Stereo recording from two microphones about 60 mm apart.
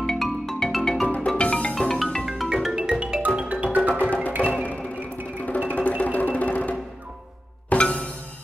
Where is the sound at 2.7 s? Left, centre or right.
Centre.